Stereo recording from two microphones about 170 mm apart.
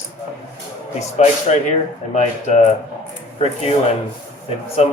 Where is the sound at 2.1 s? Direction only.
45° left (ahead or behind).